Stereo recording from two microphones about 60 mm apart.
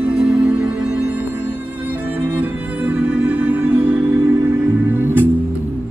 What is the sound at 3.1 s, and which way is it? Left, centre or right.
Music, right.